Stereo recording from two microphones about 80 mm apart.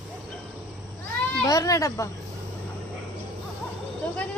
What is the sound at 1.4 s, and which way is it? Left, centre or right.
Speech, left.